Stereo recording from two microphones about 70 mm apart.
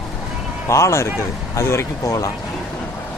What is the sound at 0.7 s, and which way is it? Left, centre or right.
Speech, left.